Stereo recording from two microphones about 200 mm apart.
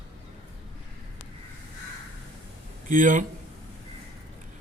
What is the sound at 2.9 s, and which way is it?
Speech, 40° right (ahead or behind).